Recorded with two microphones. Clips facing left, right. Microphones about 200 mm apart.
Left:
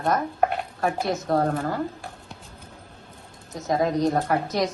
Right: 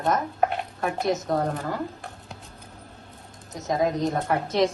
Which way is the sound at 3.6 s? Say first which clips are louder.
Left 1 dB; 20° right (ahead or behind).